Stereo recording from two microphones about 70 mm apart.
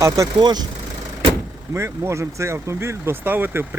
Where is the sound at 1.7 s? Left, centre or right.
Right.